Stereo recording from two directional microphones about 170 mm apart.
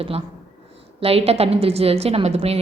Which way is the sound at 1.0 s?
35° right (ahead or behind).